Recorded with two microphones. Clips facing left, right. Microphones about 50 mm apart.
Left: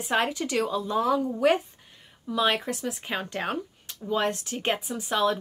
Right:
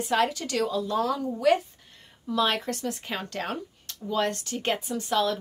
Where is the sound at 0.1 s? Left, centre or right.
Left.